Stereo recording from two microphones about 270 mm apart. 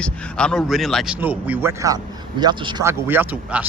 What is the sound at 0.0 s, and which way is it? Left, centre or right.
A man's voice, centre.